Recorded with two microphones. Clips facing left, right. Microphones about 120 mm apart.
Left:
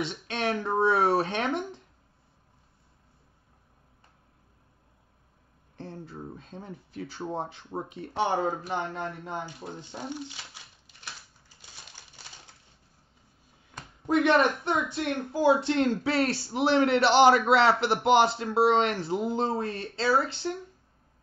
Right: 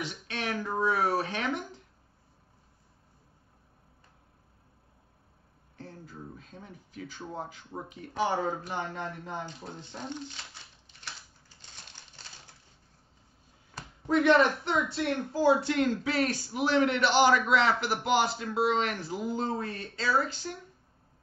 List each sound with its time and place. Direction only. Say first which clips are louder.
0.0 s a sound: left 5 dB; 25° left (ahead or behind)
5.8 s speech: left 5 dB; 30° left (ahead or behind)
9.5 s speech: left 3 dB; 10° left (ahead or behind)
11.4 s typewriter: left 1 dB; 10° left (ahead or behind)
14.0 s speech: even; 15° left (ahead or behind); by 20.6 s 35° left (ahead or behind)